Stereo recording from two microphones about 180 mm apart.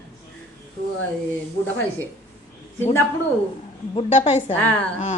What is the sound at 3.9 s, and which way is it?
Speech, 35° left (ahead or behind).